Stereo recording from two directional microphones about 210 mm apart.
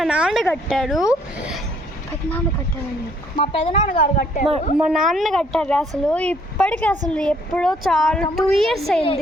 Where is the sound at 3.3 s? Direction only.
25° left (ahead or behind).